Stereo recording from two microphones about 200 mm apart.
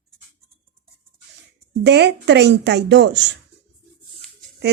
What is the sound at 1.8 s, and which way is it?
Speech, 60° right (ahead or behind).